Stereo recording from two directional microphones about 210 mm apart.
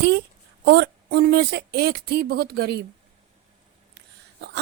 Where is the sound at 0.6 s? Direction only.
50° right (ahead or behind).